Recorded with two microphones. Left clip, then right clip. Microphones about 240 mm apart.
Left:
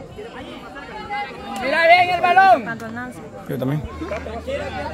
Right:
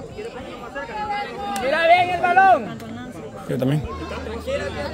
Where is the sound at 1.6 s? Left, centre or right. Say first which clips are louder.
Left 3 dB; left.